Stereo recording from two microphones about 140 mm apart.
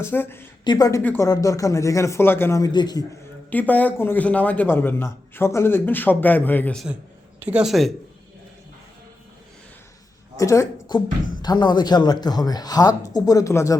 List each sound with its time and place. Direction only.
0.0 s a man's voice: 15° left (ahead or behind)
0.6 s speech: 30° left (ahead or behind)
3.5 s a man's voice: 10° left (ahead or behind)
7.3 s speech: 10° right (ahead or behind)
10.3 s a woman's voice: 20° left (ahead or behind)